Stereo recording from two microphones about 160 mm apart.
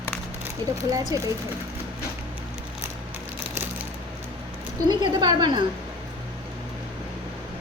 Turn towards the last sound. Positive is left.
turn(degrees=-25)  # may be behind; listen again after turning